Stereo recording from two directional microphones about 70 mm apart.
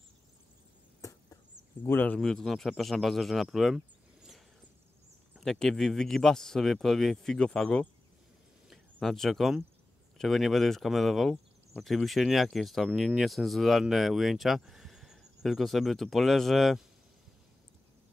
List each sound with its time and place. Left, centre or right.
1.9 s speech: left
2.1 s speech: centre
3.4 s a sound: centre
5.4 s speech: centre
8.6 s a sound: centre
10.1 s speech: centre